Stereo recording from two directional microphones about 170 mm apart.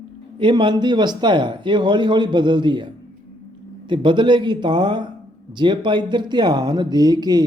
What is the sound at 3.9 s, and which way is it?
Speech, 30° right (ahead or behind).